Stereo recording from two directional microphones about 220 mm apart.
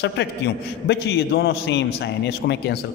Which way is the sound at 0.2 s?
50° left (ahead or behind).